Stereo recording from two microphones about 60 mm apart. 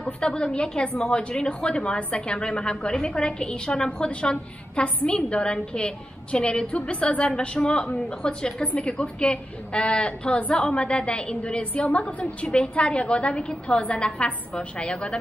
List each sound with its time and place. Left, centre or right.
0.0 s a woman's voice: centre